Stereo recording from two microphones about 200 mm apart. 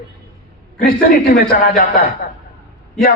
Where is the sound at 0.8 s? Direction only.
50° left (ahead or behind).